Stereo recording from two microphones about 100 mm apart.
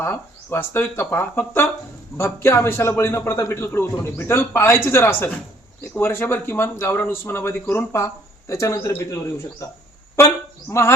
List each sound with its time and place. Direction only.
0.0 s a man's voice: 25° left (ahead or behind)